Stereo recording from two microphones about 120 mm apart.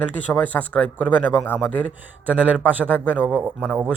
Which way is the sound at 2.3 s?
15° right (ahead or behind).